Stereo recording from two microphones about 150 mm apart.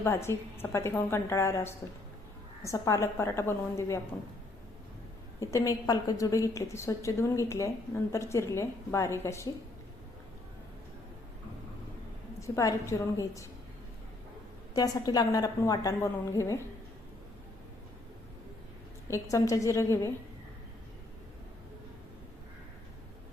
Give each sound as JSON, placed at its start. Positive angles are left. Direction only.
{"t": 0.0, "sound": "a woman's voice", "side_deg": 15}
{"t": 5.4, "sound": "a woman's voice", "side_deg": 20}
{"t": 12.4, "sound": "a woman's voice", "side_deg": 20}
{"t": 14.7, "sound": "a woman's voice", "side_deg": 25}
{"t": 19.0, "sound": "a woman's voice", "side_deg": 20}